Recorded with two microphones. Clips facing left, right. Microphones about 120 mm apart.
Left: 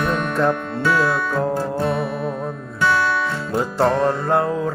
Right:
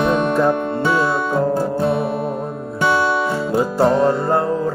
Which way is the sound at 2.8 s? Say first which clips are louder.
Right 2 dB; 20° right (ahead or behind).